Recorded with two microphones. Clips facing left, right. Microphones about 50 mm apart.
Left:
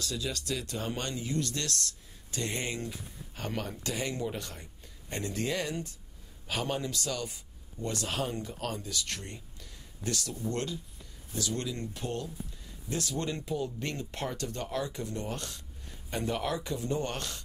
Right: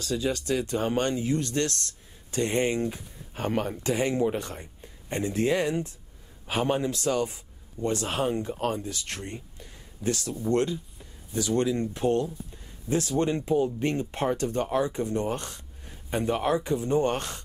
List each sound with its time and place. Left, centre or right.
0.0 s speech: right